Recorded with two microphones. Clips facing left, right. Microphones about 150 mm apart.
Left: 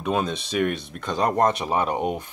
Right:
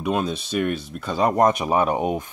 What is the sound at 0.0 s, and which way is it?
Speech, 5° right (ahead or behind).